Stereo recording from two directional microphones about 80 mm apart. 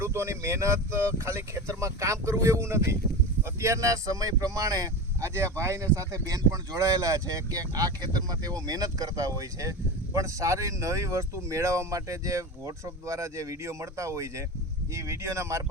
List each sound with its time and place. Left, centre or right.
0.0 s speech: right